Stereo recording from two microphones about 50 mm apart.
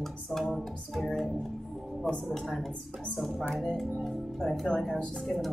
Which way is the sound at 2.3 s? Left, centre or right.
Centre.